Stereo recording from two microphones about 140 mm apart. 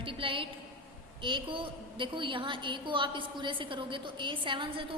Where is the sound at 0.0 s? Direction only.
40° right (ahead or behind).